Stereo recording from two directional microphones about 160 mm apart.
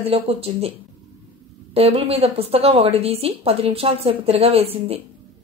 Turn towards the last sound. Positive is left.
turn(degrees=-40)  # may be behind; listen again after turning